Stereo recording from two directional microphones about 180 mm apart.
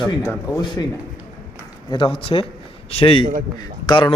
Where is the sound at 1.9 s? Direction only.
30° left (ahead or behind).